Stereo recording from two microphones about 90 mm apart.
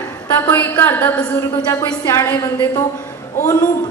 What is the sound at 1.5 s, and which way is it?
Speech, 50° left (ahead or behind).